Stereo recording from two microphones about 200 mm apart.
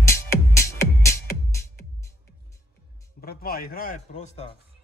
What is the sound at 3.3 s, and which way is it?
A man's voice, 50° left (ahead or behind).